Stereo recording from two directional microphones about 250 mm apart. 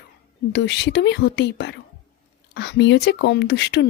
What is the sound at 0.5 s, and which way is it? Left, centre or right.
Speech, left.